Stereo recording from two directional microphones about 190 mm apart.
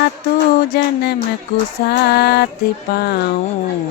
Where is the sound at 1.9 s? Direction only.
55° left (ahead or behind).